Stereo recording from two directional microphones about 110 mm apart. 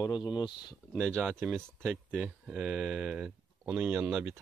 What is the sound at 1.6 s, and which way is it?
Speech, 5° left (ahead or behind).